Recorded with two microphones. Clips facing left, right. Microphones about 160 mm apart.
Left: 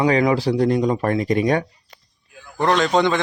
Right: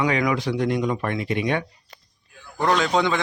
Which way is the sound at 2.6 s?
5° right (ahead or behind).